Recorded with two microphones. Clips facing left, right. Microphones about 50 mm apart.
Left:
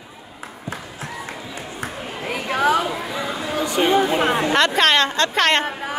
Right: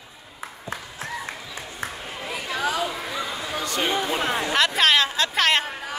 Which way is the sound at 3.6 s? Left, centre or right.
Left.